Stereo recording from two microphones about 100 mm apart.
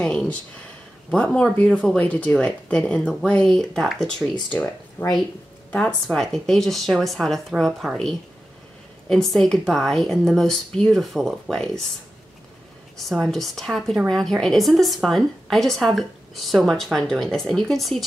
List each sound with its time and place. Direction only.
0.0 s a woman's voice: 10° left (ahead or behind)
5.0 s speech: 20° left (ahead or behind)
6.0 s a woman's voice: centre (ahead or behind)
13.1 s a woman's voice: centre (ahead or behind)